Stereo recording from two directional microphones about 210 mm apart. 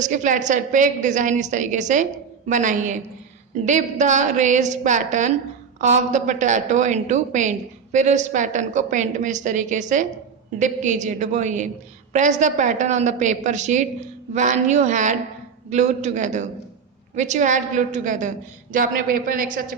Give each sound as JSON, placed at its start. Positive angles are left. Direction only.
{"t": 0.0, "sound": "a woman's voice", "side_deg": -35}